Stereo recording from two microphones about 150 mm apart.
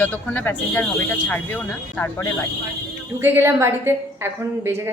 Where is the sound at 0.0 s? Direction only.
15° left (ahead or behind).